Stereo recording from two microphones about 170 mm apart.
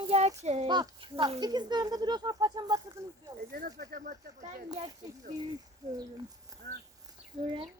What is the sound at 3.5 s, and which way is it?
Speech, 65° right (ahead or behind).